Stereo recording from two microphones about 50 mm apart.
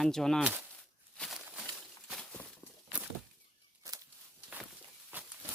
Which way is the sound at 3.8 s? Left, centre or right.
Right.